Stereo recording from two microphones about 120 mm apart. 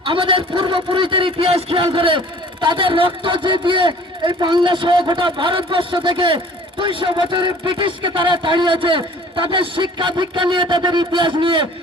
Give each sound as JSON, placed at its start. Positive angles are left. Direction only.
{"t": 0.0, "sound": "a man's voice", "side_deg": -45}